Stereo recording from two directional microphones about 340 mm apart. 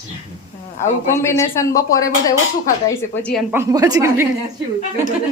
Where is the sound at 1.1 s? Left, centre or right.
Centre.